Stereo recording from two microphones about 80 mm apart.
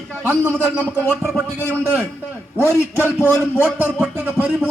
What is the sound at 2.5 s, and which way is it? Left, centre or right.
A man's voice, right.